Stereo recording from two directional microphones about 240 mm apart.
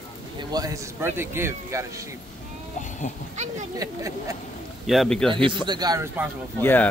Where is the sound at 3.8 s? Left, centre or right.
Centre.